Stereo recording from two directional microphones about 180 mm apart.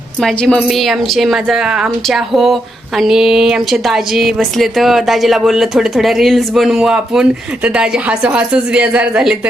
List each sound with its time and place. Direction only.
0.2 s a woman's voice: centre (ahead or behind)